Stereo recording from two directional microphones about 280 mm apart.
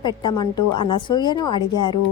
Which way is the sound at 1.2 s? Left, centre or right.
Centre.